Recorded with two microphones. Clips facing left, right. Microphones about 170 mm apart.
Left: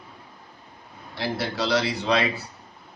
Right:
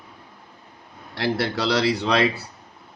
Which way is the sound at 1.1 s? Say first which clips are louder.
Right 4 dB; 70° right (ahead or behind).